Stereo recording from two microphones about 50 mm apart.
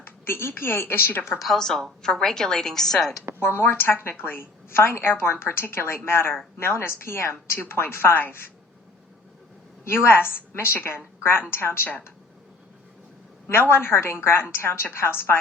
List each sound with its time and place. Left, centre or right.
0.0 s a woman's voice: left
1.4 s a woman's voice: centre
3.4 s a woman's voice: left
9.8 s a woman's voice: left
13.5 s a woman's voice: left